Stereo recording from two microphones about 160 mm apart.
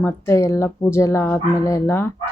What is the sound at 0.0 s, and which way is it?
Speech, 15° left (ahead or behind).